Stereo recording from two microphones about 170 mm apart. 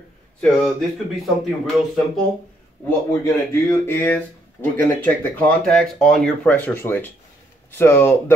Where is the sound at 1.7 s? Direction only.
Centre (ahead or behind).